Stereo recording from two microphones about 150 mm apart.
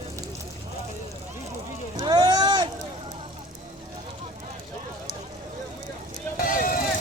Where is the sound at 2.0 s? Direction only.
25° right (ahead or behind).